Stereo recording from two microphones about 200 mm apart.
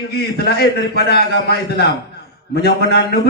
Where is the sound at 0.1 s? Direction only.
50° left (ahead or behind).